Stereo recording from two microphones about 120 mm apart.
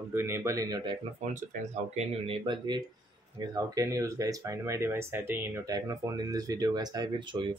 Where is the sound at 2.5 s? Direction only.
35° right (ahead or behind).